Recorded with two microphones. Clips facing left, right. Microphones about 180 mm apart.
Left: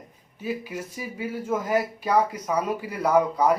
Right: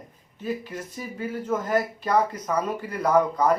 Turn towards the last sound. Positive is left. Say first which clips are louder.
# even
turn(degrees=10)  # may be behind; listen again after turning